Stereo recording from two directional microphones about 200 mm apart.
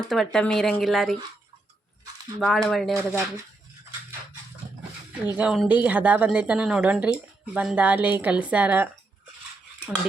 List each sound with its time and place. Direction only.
0.0 s speech: centre (ahead or behind)
2.4 s speech: centre (ahead or behind)
3.1 s speech: 10° right (ahead or behind)
5.2 s speech: 5° right (ahead or behind)